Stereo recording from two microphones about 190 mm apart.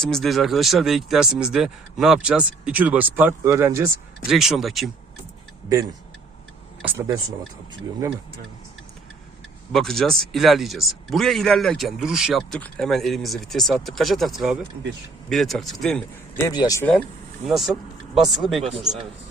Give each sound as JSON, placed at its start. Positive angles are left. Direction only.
{"t": 0.0, "sound": "speech", "side_deg": 0}
{"t": 4.3, "sound": "speech", "side_deg": 0}
{"t": 6.8, "sound": "speech", "side_deg": -10}
{"t": 9.7, "sound": "speech", "side_deg": 0}
{"t": 16.5, "sound": "speech", "side_deg": 20}
{"t": 17.5, "sound": "speech", "side_deg": 0}